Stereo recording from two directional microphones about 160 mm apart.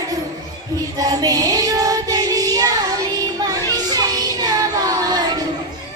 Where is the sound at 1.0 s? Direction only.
25° right (ahead or behind).